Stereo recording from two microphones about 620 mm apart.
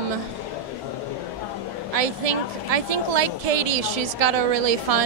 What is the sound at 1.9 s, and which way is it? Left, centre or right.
A woman's voice, right.